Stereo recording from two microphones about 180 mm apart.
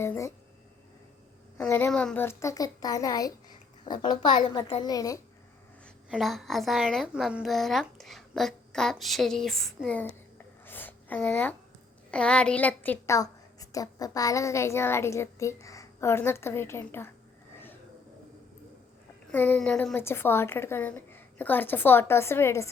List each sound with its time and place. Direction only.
0.0 s a woman's voice: 15° left (ahead or behind)
1.5 s a woman's voice: 10° left (ahead or behind)
6.1 s a woman's voice: centre (ahead or behind)
10.7 s a sound: 10° left (ahead or behind)
12.1 s a woman's voice: 5° left (ahead or behind)
19.3 s a woman's voice: 10° left (ahead or behind)